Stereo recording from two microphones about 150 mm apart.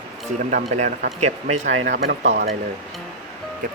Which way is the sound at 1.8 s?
75° right (ahead or behind).